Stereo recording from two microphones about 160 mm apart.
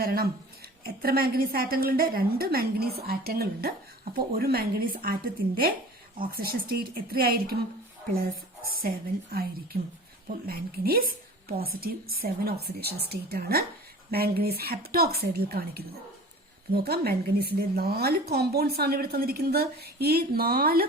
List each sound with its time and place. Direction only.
0.0 s a woman's voice: 70° right (ahead or behind)
10.2 s a woman's voice: 70° right (ahead or behind)